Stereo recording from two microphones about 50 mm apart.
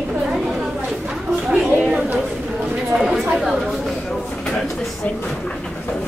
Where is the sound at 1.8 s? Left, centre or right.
Centre.